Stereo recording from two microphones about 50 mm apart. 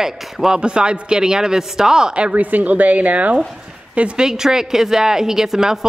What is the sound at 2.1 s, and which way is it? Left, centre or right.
Speech, right.